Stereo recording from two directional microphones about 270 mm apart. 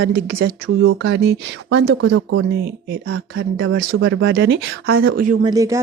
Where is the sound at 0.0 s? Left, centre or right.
Right.